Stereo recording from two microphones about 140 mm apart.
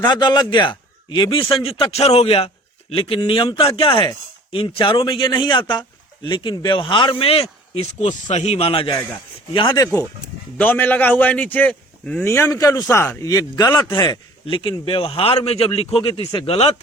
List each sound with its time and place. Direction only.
0.0 s speech: 30° left (ahead or behind)
9.7 s a man's voice: 25° left (ahead or behind)
10.6 s a man's voice: 15° left (ahead or behind)
12.3 s a man's voice: 20° left (ahead or behind); by 16.7 s 45° left (ahead or behind)